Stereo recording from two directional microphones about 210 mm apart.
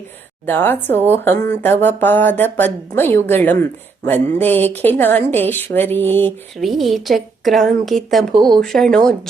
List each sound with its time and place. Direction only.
0.4 s a woman's voice: 10° left (ahead or behind)
8.3 s speech: 20° right (ahead or behind)
8.5 s a woman's voice: centre (ahead or behind)